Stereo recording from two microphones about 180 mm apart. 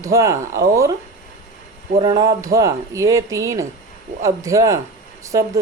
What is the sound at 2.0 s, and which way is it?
Speech, 20° right (ahead or behind).